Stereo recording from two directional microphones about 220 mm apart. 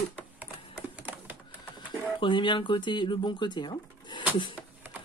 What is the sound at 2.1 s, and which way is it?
Speech, 20° left (ahead or behind).